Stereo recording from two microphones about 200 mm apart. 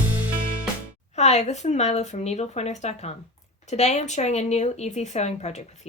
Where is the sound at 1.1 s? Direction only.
35° left (ahead or behind).